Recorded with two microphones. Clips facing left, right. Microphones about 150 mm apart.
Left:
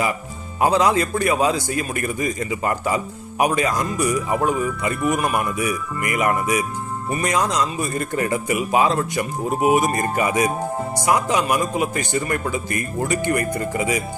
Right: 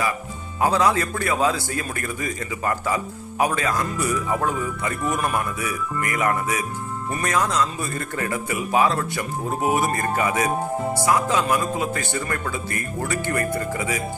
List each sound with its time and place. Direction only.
0.6 s a man's voice: 20° left (ahead or behind)